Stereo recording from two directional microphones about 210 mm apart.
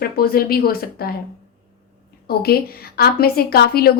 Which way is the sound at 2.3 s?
45° left (ahead or behind).